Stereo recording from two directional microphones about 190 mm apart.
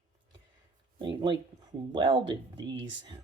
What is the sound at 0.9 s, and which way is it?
Speech, 25° right (ahead or behind).